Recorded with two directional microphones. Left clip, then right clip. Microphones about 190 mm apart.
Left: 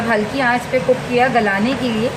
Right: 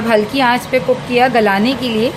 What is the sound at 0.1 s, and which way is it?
Speech, 50° right (ahead or behind).